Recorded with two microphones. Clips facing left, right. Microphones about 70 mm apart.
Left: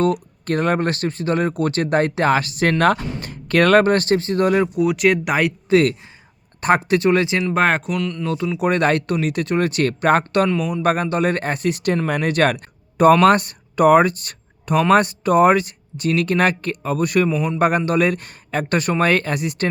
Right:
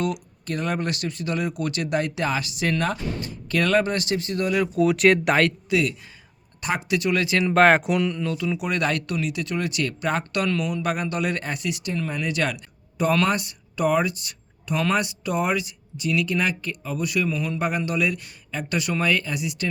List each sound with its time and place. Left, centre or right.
0.0 s speech: left
4.2 s speech: left
4.8 s speech: centre
5.6 s speech: left
7.5 s speech: centre
8.5 s speech: left
12.0 s speech: left